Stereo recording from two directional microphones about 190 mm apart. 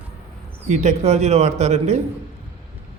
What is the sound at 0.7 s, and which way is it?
Speech, 35° right (ahead or behind).